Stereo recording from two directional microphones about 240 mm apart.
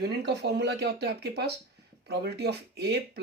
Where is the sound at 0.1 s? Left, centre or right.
Right.